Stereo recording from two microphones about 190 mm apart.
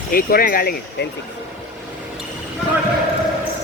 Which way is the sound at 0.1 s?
50° left (ahead or behind).